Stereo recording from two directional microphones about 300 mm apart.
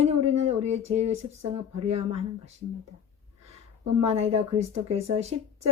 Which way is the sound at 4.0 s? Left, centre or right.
Centre.